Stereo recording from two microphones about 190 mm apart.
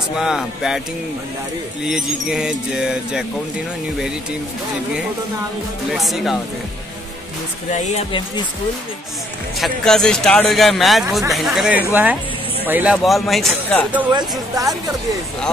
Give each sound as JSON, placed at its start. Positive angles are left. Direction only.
{"t": 0.2, "sound": "speech", "side_deg": 0}
{"t": 1.9, "sound": "speech", "side_deg": -5}
{"t": 5.9, "sound": "speech", "side_deg": 0}
{"t": 7.7, "sound": "music", "side_deg": 35}
{"t": 9.6, "sound": "speech", "side_deg": 5}
{"t": 14.1, "sound": "speech", "side_deg": -20}